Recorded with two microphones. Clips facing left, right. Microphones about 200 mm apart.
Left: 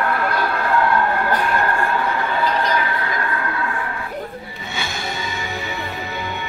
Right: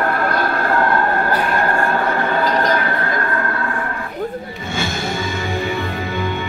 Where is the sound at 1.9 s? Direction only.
45° right (ahead or behind).